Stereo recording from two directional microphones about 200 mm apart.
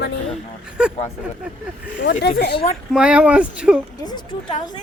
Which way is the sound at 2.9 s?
5° right (ahead or behind).